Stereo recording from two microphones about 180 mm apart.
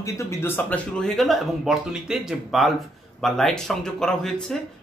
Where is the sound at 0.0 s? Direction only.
15° left (ahead or behind).